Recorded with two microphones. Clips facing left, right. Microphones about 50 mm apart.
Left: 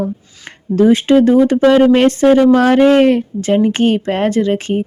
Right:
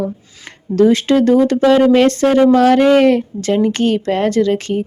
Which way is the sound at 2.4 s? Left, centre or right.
Left.